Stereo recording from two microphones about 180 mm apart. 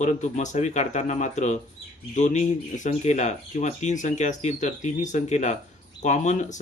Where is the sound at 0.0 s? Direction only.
40° left (ahead or behind).